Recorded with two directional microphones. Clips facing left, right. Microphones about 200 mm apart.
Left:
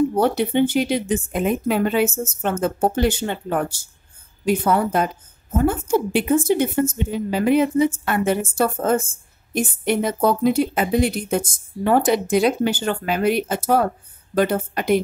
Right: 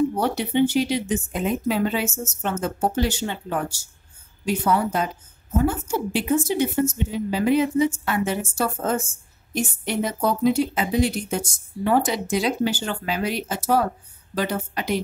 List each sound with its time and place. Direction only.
0.1 s a woman's voice: 50° left (ahead or behind)